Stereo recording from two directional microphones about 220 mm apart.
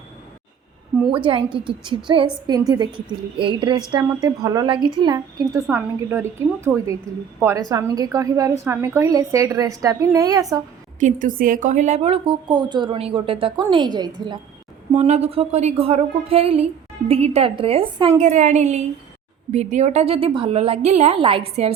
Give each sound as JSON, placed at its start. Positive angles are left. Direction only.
{"t": 1.1, "sound": "a woman's voice", "side_deg": -25}
{"t": 11.0, "sound": "a woman's voice", "side_deg": -40}
{"t": 14.9, "sound": "a woman's voice", "side_deg": -30}